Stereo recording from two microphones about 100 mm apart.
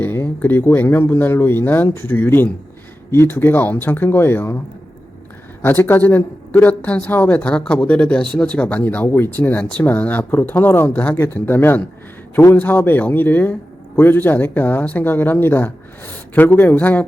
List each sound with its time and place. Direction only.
0.0 s a man's voice: 20° left (ahead or behind)
5.6 s a man's voice: 20° left (ahead or behind)